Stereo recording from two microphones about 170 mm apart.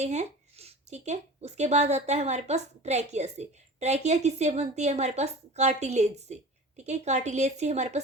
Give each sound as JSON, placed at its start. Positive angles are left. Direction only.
{"t": 0.0, "sound": "speech", "side_deg": -40}